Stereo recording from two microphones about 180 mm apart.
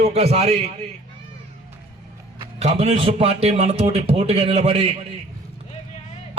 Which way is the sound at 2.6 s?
35° right (ahead or behind).